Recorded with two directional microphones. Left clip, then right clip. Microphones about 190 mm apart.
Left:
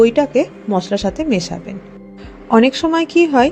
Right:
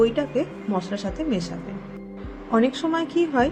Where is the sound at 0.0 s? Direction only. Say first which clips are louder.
Left 9 dB; 35° left (ahead or behind).